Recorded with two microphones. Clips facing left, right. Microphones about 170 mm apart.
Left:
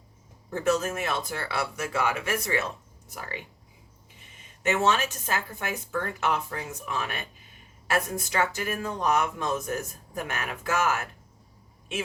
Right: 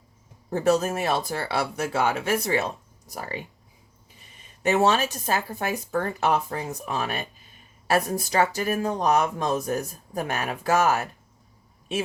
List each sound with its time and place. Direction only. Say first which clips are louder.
0.5 s speech: right 4 dB; 35° right (ahead or behind)
4.6 s speech: right 4 dB; 35° right (ahead or behind)